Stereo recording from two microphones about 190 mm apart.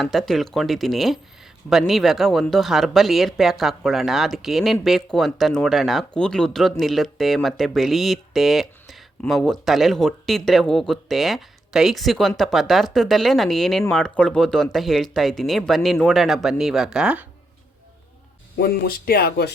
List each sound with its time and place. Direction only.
0.0 s speech: centre (ahead or behind)
18.6 s speech: 55° left (ahead or behind)